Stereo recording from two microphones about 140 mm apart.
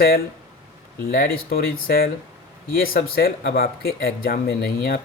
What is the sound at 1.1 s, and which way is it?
Speech, 90° left.